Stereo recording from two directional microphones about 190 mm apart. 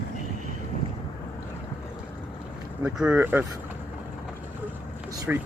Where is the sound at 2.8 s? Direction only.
5° right (ahead or behind).